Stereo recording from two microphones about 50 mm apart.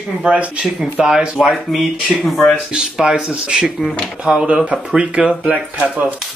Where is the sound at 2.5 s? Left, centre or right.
Centre.